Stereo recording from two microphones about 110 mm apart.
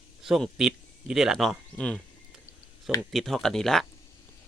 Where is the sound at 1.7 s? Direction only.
10° left (ahead or behind).